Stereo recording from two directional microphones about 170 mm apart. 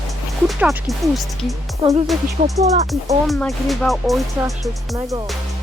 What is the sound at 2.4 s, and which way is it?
Music, 45° right (ahead or behind).